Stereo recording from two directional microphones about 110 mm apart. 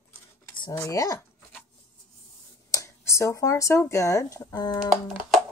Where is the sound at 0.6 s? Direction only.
35° left (ahead or behind).